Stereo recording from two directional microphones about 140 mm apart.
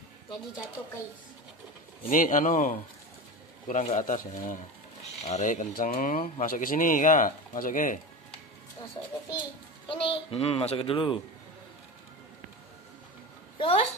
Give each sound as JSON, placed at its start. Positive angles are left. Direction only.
{"t": 2.0, "sound": "speech", "side_deg": 70}
{"t": 3.6, "sound": "speech", "side_deg": 60}
{"t": 9.0, "sound": "a child's voice", "side_deg": 30}
{"t": 13.6, "sound": "a woman's voice", "side_deg": 40}